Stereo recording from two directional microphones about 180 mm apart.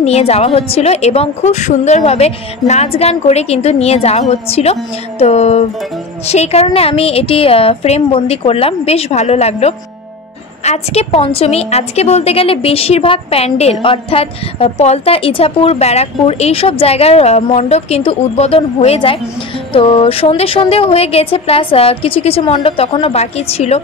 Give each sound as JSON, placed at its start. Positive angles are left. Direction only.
{"t": 0.0, "sound": "a woman's voice", "side_deg": 35}